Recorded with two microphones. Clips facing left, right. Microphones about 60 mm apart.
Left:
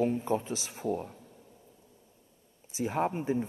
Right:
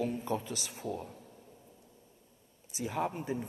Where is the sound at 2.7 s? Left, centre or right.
Left.